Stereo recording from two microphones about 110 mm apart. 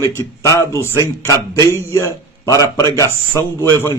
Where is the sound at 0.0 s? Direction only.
25° left (ahead or behind).